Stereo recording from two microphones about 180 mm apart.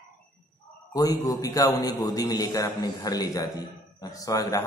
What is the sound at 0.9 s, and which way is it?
A man's voice, 20° left (ahead or behind).